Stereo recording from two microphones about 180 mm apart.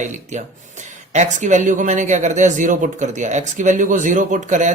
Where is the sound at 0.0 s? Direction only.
40° right (ahead or behind).